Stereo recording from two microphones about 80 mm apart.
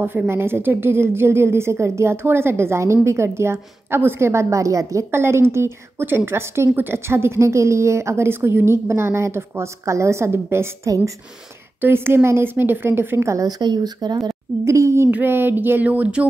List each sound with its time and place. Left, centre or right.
0.3 s a woman's voice: right
13.2 s a woman's voice: right
13.5 s speech: right
14.1 s a woman's voice: right
15.0 s a woman's voice: right